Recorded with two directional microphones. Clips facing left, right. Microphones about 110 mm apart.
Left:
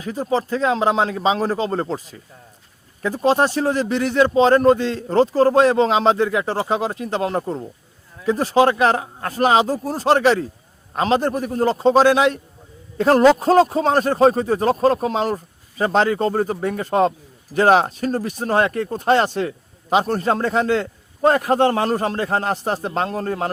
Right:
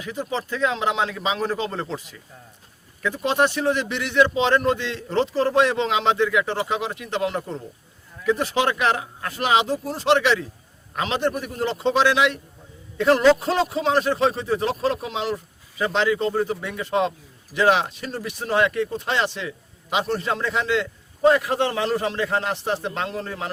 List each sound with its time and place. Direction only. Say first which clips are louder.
0.0 s speech: left 6 dB; 35° left (ahead or behind)